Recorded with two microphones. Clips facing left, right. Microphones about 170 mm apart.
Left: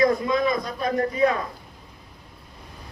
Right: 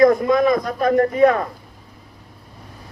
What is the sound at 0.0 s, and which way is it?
A man's voice, 50° right (ahead or behind).